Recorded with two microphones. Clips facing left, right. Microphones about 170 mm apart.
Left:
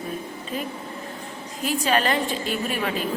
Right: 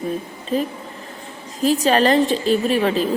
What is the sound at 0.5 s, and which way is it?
A woman's voice, 35° right (ahead or behind).